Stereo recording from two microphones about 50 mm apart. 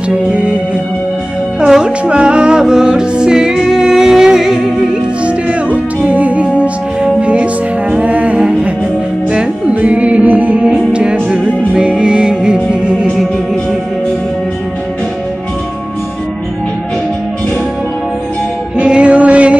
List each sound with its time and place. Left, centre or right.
0.1 s music: right
1.6 s music: centre
5.2 s music: right
18.8 s music: right